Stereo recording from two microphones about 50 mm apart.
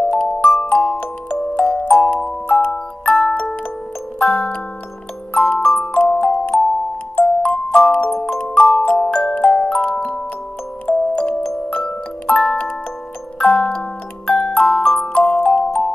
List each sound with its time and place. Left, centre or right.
0.0 s glockenspiel: centre
0.4 s glockenspiel: left
2.5 s music: left
5.3 s glockenspiel: left
7.2 s music: centre
8.2 s glockenspiel: left
10.9 s music: left
14.3 s glockenspiel: left